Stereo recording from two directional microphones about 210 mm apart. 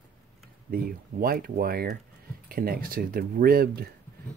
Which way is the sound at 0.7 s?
45° right (ahead or behind).